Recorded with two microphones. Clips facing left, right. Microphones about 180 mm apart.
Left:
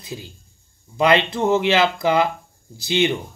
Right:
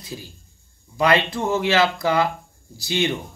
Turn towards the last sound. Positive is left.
turn(degrees=20)  # may be behind; listen again after turning